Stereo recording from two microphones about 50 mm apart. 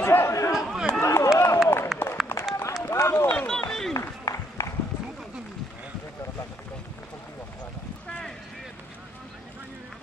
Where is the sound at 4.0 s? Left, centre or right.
Left.